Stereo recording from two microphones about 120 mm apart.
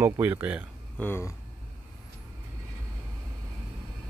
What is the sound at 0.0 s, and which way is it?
Speech, 15° right (ahead or behind).